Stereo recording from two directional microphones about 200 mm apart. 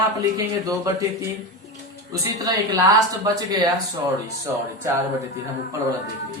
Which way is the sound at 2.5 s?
20° right (ahead or behind).